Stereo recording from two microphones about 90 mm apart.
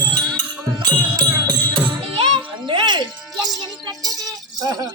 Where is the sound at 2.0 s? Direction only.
80° right.